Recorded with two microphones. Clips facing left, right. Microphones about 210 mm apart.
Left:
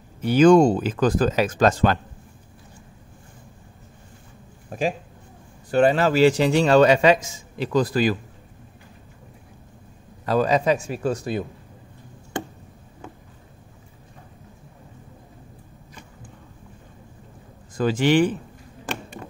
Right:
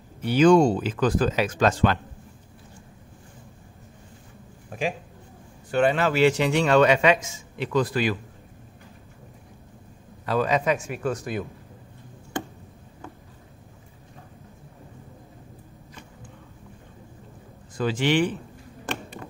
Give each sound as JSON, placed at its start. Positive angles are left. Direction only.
{"t": 0.2, "sound": "speech", "side_deg": 45}
{"t": 4.6, "sound": "a man's voice", "side_deg": 40}
{"t": 10.2, "sound": "a man's voice", "side_deg": 40}
{"t": 17.7, "sound": "speech", "side_deg": 45}